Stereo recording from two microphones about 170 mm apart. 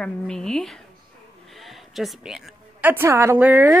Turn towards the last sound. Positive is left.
turn(degrees=-10)  # may be behind; listen again after turning